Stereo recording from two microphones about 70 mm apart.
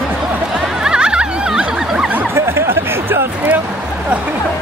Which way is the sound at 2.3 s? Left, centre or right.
Right.